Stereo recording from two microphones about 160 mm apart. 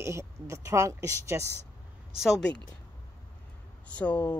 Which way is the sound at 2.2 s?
Centre (ahead or behind).